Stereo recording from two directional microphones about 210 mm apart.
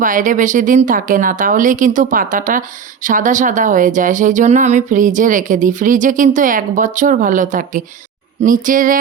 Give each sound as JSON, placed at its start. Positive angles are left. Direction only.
{"t": 0.0, "sound": "speech", "side_deg": -40}